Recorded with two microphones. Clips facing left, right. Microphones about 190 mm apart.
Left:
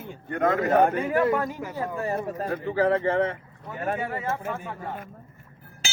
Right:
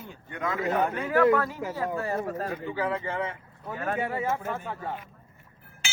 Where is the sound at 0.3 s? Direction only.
50° left (ahead or behind).